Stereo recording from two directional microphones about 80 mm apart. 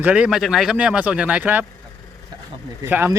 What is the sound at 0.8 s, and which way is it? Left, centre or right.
Speech, centre.